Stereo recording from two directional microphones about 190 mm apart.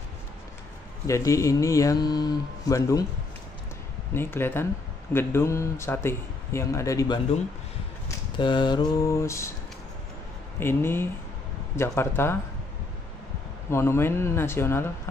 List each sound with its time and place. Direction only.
1.0 s speech: 15° left (ahead or behind)
4.1 s speech: 10° left (ahead or behind)
8.4 s mantra: 25° left (ahead or behind)
10.6 s speech: 10° left (ahead or behind)
13.7 s speech: 15° left (ahead or behind)